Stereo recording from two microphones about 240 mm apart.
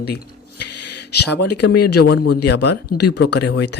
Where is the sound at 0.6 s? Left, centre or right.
Left.